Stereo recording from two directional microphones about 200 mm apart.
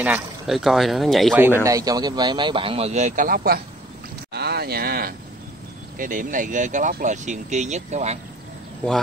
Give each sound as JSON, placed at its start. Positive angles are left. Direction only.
{"t": 0.0, "sound": "speech", "side_deg": -5}
{"t": 1.6, "sound": "speech", "side_deg": -15}
{"t": 4.3, "sound": "a sound", "side_deg": -55}
{"t": 5.9, "sound": "speech", "side_deg": -40}
{"t": 8.8, "sound": "a man's voice", "side_deg": 5}